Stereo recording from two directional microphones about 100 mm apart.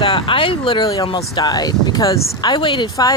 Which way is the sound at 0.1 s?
60° left (ahead or behind).